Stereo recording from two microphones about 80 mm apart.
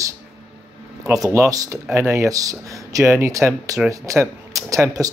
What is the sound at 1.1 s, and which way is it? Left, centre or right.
Speech, right.